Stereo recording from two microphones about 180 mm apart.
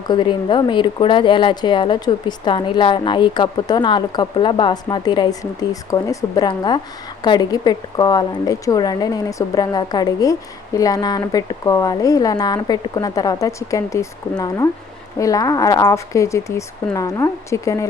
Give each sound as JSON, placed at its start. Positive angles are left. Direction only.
{"t": 0.1, "sound": "speech", "side_deg": 25}